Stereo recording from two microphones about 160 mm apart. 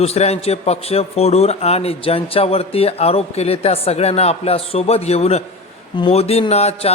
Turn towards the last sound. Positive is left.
turn(degrees=40)  # may be behind; listen again after turning